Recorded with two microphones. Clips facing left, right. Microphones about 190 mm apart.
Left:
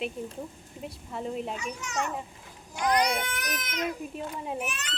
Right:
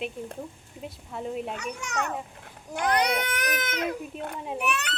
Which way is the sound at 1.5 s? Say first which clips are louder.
Right 1 dB; 65° right (ahead or behind).